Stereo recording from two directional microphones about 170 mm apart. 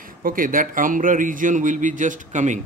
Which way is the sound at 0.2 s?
55° right (ahead or behind).